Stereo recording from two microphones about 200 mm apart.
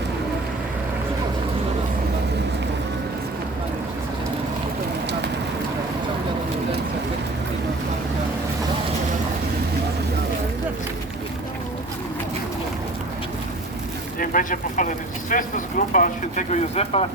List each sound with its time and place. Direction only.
14.2 s speech: 40° left (ahead or behind)